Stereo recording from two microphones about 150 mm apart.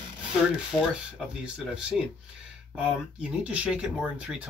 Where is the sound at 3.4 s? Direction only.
10° right (ahead or behind).